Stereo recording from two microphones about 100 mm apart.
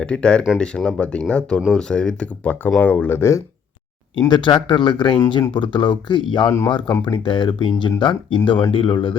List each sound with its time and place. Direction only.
0.0 s speech: 10° left (ahead or behind); by 3.4 s 25° left (ahead or behind)
4.2 s speech: 50° left (ahead or behind)